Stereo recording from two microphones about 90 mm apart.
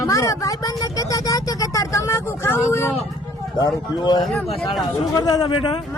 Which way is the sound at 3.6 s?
55° left (ahead or behind).